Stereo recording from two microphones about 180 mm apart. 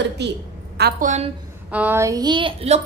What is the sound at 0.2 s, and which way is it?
Speech, 70° right (ahead or behind).